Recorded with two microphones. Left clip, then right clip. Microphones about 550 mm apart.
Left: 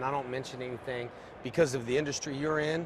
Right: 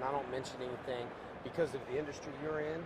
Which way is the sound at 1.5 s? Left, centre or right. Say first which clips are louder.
Left 9 dB; left.